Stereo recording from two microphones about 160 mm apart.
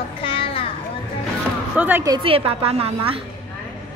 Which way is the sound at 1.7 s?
10° right (ahead or behind).